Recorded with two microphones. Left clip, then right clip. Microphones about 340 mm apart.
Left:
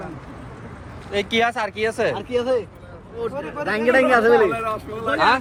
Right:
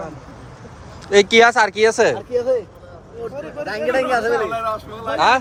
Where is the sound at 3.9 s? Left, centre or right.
Left.